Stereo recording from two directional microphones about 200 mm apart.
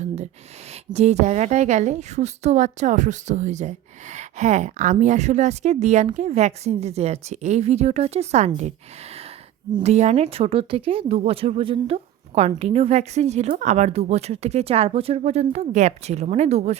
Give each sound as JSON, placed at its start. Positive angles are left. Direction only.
{"t": 0.9, "sound": "a woman's voice", "side_deg": -35}
{"t": 9.7, "sound": "a woman's voice", "side_deg": -35}